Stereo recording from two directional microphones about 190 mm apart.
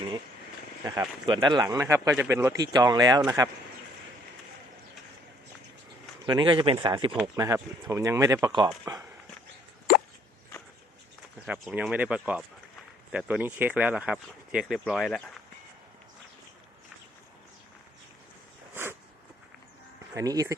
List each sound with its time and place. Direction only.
0.9 s speech: 25° right (ahead or behind)
6.2 s speech: 25° right (ahead or behind)
11.4 s speech: 5° right (ahead or behind)
18.7 s a sound: 10° right (ahead or behind)
20.1 s speech: 20° right (ahead or behind)